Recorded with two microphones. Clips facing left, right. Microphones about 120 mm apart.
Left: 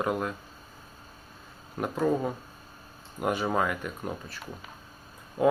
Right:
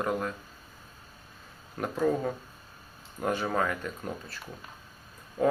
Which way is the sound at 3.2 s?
15° left (ahead or behind).